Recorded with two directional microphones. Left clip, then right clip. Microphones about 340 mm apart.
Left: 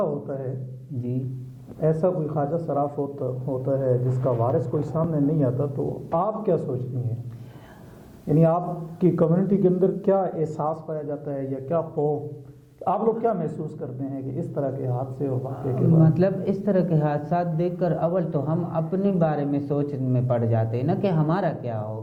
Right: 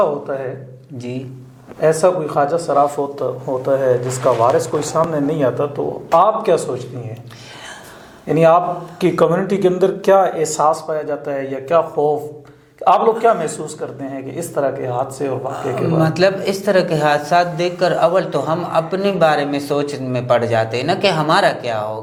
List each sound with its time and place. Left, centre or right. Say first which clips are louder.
0.0 s speech: right 9 dB; centre
1.8 s speech: right 9 dB; centre
8.3 s speech: right 10 dB; centre
11.9 s speech: right 8 dB; right
12.8 s speech: right 10 dB; centre